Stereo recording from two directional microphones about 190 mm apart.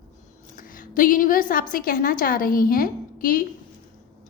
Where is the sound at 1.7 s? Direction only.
50° left (ahead or behind).